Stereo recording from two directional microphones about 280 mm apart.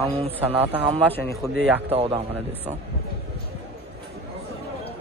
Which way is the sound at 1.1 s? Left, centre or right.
Centre.